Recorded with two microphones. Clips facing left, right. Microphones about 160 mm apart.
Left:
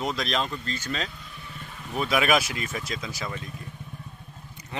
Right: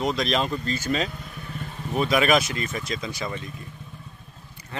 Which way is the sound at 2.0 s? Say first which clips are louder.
Right 3 dB; 5° left (ahead or behind).